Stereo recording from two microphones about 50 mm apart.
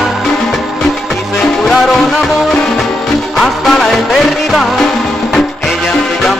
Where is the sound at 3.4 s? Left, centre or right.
Centre.